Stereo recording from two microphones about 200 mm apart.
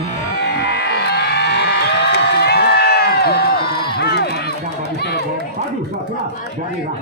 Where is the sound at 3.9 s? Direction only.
55° left (ahead or behind).